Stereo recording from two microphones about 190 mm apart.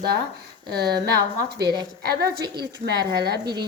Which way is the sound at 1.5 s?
60° right (ahead or behind).